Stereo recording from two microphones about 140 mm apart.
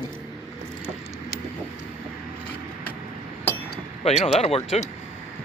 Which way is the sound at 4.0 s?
50° left (ahead or behind).